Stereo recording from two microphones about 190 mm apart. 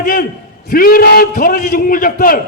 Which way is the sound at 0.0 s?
45° left (ahead or behind).